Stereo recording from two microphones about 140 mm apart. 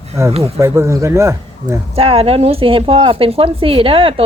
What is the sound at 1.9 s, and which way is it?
Speech, 45° right (ahead or behind).